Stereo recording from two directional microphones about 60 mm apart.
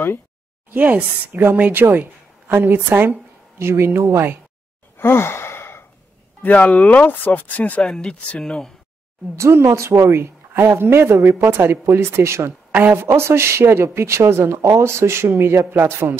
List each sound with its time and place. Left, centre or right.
0.7 s speech: right
3.5 s speech: right
4.9 s sigh: left
6.4 s speech: left
7.8 s speech: centre
9.4 s speech: right